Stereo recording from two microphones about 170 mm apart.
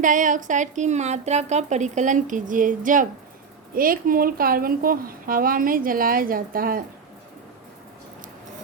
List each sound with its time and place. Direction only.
0.0 s a woman's voice: 50° right (ahead or behind)